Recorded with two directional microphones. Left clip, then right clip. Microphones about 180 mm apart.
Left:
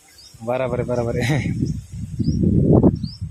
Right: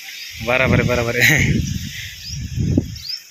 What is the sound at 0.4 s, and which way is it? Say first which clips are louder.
Speech: right 5 dB; 5° left (ahead or behind).